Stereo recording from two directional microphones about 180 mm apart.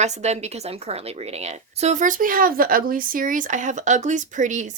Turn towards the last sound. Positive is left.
turn(degrees=-45)  # may be behind; listen again after turning